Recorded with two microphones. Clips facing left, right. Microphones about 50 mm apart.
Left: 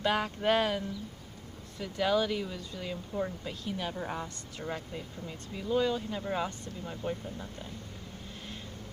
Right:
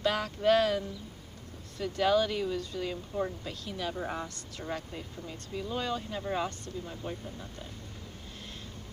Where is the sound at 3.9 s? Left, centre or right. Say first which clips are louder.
Right 1 dB; centre.